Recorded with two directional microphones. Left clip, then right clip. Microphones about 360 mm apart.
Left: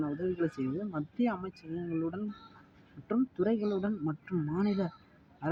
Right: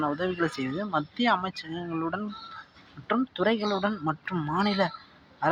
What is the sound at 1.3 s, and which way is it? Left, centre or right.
Speech, left.